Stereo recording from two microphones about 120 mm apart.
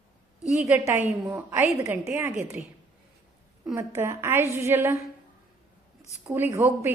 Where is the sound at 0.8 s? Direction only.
20° right (ahead or behind).